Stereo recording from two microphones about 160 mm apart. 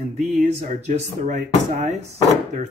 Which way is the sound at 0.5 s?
45° right (ahead or behind).